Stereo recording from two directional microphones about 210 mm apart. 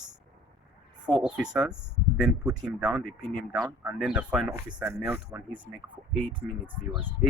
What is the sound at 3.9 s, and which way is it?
Speech, 5° right (ahead or behind).